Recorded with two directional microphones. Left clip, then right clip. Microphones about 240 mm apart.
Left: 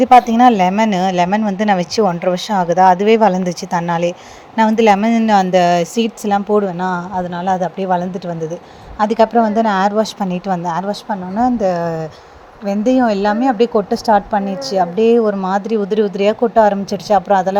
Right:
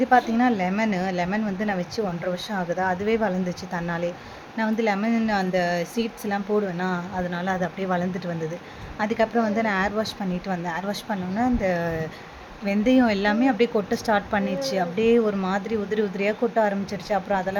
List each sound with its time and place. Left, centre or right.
0.0 s speech: left
10.8 s a woman's voice: centre
11.4 s speech: centre